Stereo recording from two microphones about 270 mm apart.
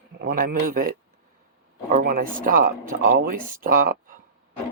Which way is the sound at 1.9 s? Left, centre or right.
Right.